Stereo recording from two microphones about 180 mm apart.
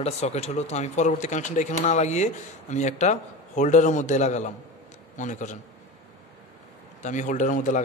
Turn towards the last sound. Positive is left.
turn(degrees=45)  # may be behind; listen again after turning